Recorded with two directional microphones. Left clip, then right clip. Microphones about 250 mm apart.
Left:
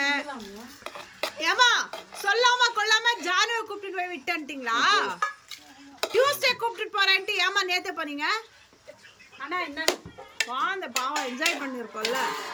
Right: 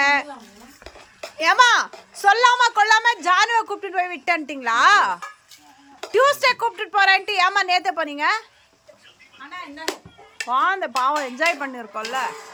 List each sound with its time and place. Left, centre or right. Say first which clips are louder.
0.0 s a sound: right 8 dB; centre
1.4 s a child's voice: right 7 dB; centre
10.5 s a child's voice: right 11 dB; centre